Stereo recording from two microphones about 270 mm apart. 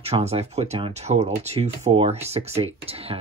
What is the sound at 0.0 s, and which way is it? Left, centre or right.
Speech, right.